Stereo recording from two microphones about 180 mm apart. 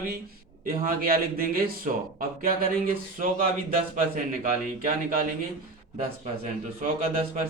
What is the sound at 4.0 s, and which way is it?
A man's voice, 50° right (ahead or behind).